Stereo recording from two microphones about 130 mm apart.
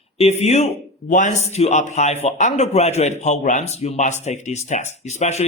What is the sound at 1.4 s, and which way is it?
A man's voice, 60° left (ahead or behind).